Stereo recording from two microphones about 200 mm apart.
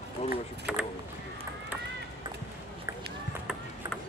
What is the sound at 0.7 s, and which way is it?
Speech, 5° right (ahead or behind).